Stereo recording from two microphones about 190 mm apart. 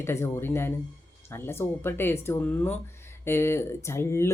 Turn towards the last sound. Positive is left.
turn(degrees=15)  # may be behind; listen again after turning